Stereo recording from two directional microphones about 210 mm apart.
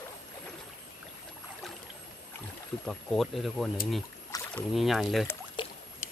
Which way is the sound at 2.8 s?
Centre (ahead or behind).